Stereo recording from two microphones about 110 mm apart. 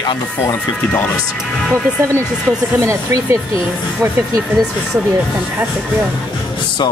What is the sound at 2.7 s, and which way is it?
Speech, 25° right (ahead or behind).